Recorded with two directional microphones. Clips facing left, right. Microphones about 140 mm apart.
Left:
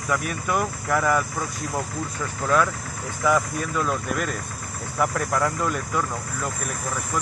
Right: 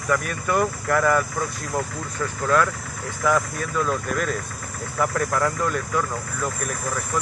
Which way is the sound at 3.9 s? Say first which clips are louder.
Right 2 dB; centre (ahead or behind).